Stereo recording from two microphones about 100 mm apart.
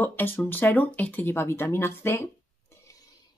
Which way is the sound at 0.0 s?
20° left (ahead or behind).